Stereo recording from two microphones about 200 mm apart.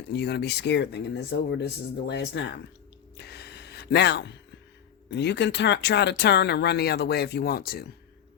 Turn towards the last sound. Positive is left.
turn(degrees=50)  # may be behind; listen again after turning